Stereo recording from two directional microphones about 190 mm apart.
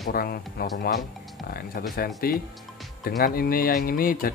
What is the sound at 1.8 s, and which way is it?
Speech, 50° left (ahead or behind).